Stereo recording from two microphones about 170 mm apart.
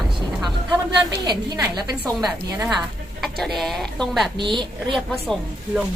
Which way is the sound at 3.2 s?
Centre (ahead or behind).